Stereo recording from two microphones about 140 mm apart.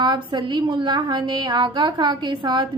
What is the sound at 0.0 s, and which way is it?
A woman's voice, 30° right (ahead or behind).